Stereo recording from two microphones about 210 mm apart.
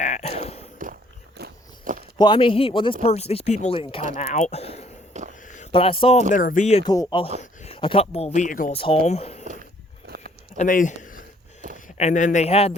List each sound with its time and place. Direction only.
0.0 s a sound: 30° left (ahead or behind)
1.4 s biting: 40° right (ahead or behind)
2.1 s speech: 20° left (ahead or behind)
5.2 s a sound: 35° right (ahead or behind)
5.7 s speech: 25° left (ahead or behind)
6.3 s speech: 40° left (ahead or behind)
6.8 s speech: 20° left (ahead or behind)
7.3 s speech: 30° left (ahead or behind)
8.7 s speech: 25° left (ahead or behind)
10.1 s a sound: 50° right (ahead or behind)
10.6 s speech: 35° left (ahead or behind)